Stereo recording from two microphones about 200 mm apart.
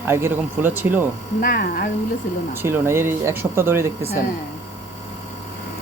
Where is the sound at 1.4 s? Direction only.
45° left (ahead or behind).